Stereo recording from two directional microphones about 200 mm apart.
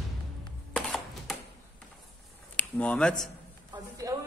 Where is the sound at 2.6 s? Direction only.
5° left (ahead or behind).